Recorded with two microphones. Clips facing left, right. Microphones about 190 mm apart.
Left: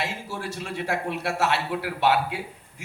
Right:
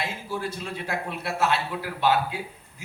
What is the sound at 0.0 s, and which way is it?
A man's voice, 75° left (ahead or behind).